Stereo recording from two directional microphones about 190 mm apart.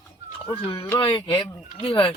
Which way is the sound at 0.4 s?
30° left (ahead or behind).